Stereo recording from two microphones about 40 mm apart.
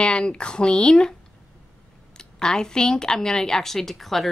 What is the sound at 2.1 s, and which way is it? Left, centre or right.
Speech, centre.